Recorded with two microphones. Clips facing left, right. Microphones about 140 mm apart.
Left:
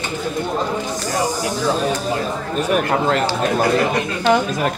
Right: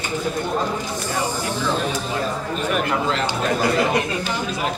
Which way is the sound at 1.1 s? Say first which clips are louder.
Left 4 dB; 40° left (ahead or behind).